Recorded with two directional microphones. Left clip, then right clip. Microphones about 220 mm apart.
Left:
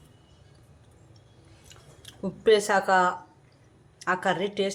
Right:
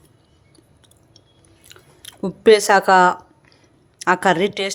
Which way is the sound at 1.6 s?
45° right (ahead or behind).